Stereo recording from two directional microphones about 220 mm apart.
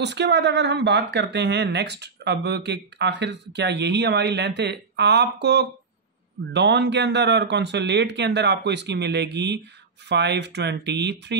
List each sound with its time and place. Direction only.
0.0 s speech: 50° right (ahead or behind)